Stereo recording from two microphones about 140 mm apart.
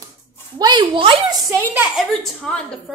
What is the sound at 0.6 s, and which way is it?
Speech, 30° right (ahead or behind).